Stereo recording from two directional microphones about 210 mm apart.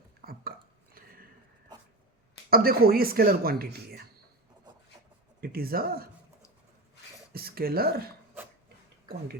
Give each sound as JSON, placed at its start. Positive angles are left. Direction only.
{"t": 0.2, "sound": "burping", "side_deg": -45}
{"t": 2.5, "sound": "speech", "side_deg": -45}
{"t": 5.4, "sound": "speech", "side_deg": -45}
{"t": 7.3, "sound": "speech", "side_deg": -45}